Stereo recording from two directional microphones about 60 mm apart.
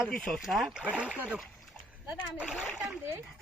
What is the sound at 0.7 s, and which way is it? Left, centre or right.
Speech, centre.